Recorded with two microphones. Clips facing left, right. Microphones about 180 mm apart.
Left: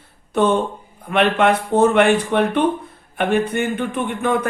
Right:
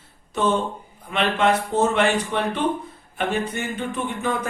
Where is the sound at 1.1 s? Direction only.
60° left (ahead or behind).